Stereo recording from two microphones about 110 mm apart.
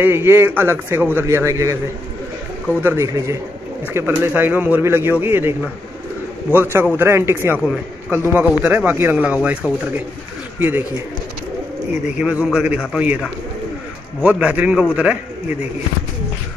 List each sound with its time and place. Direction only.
0.0 s a man's voice: 20° right (ahead or behind)
12.2 s speech: 10° right (ahead or behind)